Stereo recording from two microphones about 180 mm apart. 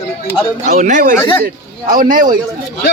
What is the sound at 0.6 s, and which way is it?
A man's voice, 40° right (ahead or behind).